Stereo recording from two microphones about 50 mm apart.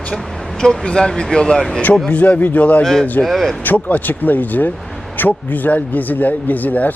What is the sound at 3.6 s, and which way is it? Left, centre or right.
Speech, left.